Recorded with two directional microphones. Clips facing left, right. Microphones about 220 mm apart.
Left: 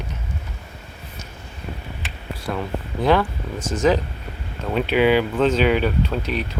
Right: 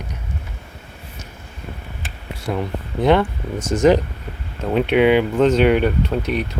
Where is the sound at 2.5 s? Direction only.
15° right (ahead or behind).